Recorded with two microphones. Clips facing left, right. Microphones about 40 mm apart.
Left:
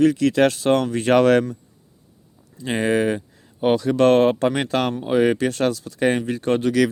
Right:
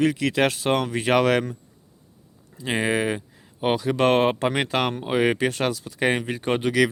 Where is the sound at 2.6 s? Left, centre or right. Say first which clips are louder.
Left 3 dB; centre.